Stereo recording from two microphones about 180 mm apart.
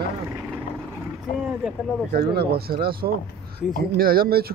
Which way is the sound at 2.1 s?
60° right (ahead or behind).